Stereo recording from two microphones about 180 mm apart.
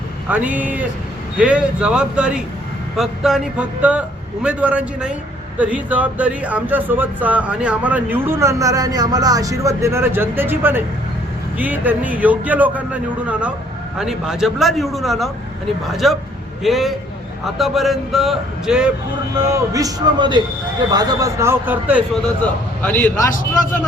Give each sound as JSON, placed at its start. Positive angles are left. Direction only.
{"t": 0.3, "sound": "a man's voice", "side_deg": -10}
{"t": 19.4, "sound": "a man's voice", "side_deg": -15}
{"t": 22.8, "sound": "speech", "side_deg": 10}